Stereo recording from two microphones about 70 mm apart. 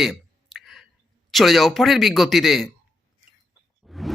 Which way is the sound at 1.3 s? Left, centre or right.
Centre.